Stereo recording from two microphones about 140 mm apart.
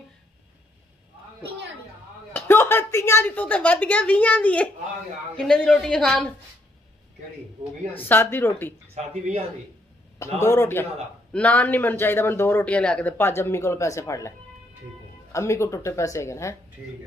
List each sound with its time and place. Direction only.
2.3 s a woman's voice: 15° left (ahead or behind)
7.9 s speech: 15° left (ahead or behind)
8.9 s speech: 45° right (ahead or behind)
10.4 s speech: 20° left (ahead or behind)
15.3 s speech: 20° left (ahead or behind)